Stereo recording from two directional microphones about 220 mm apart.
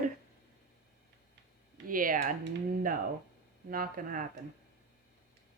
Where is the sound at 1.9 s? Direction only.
40° right (ahead or behind).